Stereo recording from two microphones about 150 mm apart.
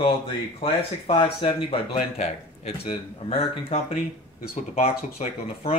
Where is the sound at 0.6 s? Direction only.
40° left (ahead or behind).